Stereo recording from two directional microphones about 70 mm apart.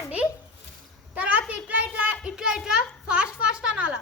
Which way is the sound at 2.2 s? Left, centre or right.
Centre.